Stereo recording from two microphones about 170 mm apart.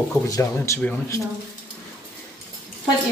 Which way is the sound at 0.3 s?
15° left (ahead or behind).